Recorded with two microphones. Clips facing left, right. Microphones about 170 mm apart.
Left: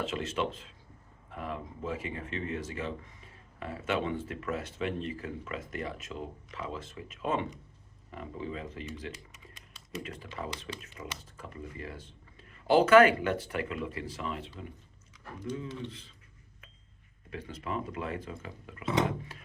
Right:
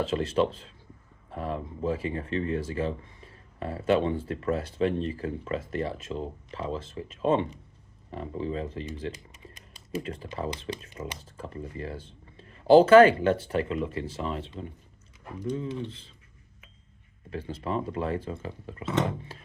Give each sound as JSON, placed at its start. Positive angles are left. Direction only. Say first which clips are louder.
{"t": 0.0, "sound": "speech", "louder": "right 7 dB", "side_deg": -30}
{"t": 17.3, "sound": "speech", "louder": "right 5 dB", "side_deg": -30}